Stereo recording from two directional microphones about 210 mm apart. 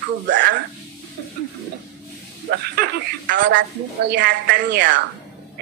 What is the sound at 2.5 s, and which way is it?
Speech, 50° right (ahead or behind).